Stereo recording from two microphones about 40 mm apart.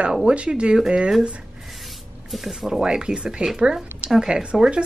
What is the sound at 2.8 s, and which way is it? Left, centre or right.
Speech, right.